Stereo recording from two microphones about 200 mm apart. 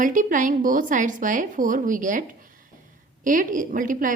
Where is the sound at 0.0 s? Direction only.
40° right (ahead or behind).